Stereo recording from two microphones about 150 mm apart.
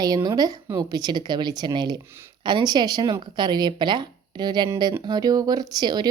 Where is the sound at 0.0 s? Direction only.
25° right (ahead or behind).